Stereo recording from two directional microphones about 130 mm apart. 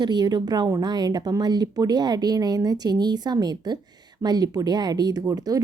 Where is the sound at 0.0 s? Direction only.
35° right (ahead or behind).